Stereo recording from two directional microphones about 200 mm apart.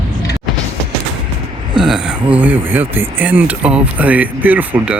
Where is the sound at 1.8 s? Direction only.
5° right (ahead or behind).